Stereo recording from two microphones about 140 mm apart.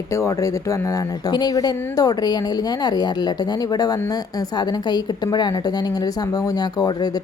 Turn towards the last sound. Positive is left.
turn(degrees=30)  # may be behind; listen again after turning